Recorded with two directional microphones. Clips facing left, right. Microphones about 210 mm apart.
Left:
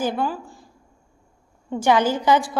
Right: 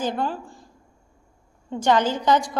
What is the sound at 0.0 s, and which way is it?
Speech, 5° left (ahead or behind).